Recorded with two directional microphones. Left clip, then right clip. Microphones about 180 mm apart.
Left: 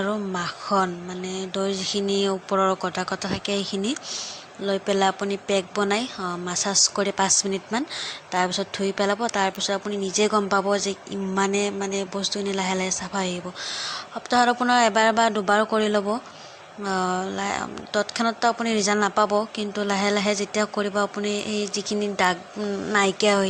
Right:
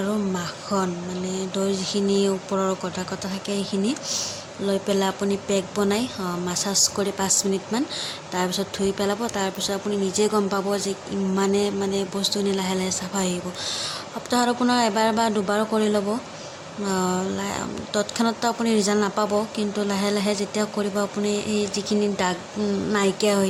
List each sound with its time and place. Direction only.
0.0 s speech: 35° left (ahead or behind)
4.1 s speech: 25° left (ahead or behind)